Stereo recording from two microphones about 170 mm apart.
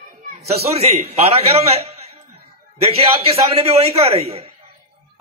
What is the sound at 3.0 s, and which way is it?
A man's voice, 35° right (ahead or behind).